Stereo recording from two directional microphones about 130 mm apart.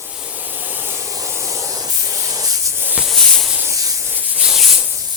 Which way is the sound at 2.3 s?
30° right (ahead or behind).